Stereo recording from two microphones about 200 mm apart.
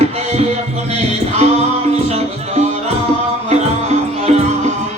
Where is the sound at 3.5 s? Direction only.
35° right (ahead or behind).